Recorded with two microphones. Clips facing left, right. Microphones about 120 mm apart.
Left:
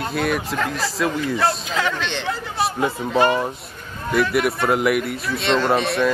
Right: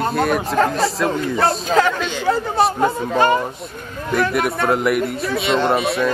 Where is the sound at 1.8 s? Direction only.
45° right (ahead or behind).